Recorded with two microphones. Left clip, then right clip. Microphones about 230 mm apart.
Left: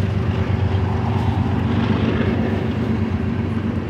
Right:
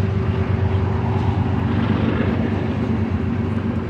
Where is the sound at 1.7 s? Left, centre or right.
Left.